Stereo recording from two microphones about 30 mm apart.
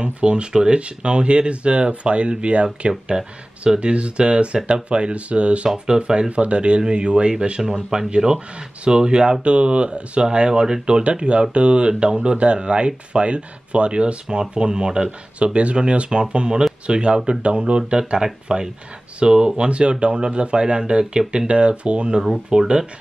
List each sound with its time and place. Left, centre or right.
0.0 s speech: right
0.5 s speech: right
0.7 s speech: right
10.3 s speech: right
11.5 s speech: right
15.3 s speech: right
19.5 s speech: right